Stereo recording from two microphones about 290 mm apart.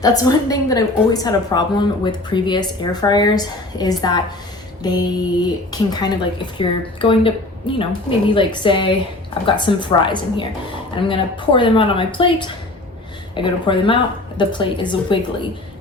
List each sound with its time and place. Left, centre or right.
0.0 s speech: centre